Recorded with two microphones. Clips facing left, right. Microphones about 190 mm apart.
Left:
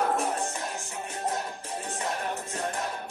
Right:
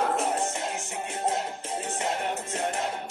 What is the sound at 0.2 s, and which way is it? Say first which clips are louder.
Music: right 2 dB; 25° right (ahead or behind).